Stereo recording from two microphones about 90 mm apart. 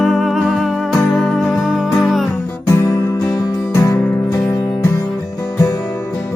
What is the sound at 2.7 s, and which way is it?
Music, 35° left (ahead or behind).